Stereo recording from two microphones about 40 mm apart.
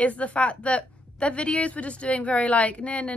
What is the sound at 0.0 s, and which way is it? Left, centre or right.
A woman's voice, left.